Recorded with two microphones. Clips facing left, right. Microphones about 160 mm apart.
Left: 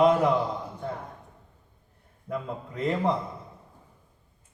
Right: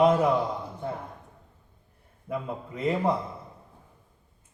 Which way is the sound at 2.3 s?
5° right (ahead or behind).